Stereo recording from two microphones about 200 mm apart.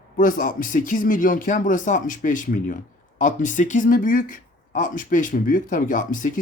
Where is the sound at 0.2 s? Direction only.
45° left (ahead or behind).